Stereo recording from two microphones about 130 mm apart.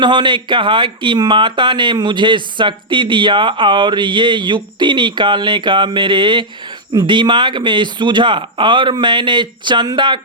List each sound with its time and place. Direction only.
0.0 s speech: 35° right (ahead or behind)